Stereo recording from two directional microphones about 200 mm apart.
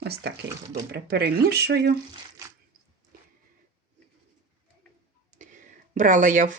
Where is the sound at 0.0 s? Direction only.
55° right (ahead or behind).